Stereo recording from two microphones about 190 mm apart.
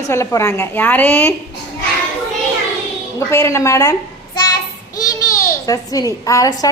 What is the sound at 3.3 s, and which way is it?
Speech, 15° left (ahead or behind).